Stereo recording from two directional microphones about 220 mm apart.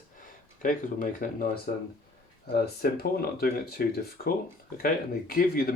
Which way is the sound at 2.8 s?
45° left (ahead or behind).